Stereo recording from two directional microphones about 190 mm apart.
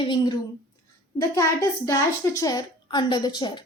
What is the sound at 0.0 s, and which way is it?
Speech, 25° left (ahead or behind).